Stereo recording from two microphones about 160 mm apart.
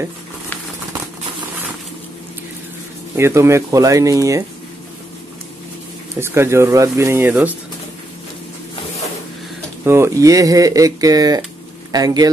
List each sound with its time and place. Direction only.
3.2 s speech: 15° right (ahead or behind)
6.1 s speech: 15° right (ahead or behind)
9.8 s speech: 15° right (ahead or behind)